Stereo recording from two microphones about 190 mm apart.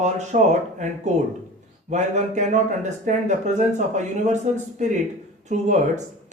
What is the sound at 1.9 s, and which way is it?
Speech, 40° right (ahead or behind).